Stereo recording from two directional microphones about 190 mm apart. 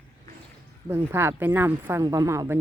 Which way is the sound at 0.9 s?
15° right (ahead or behind).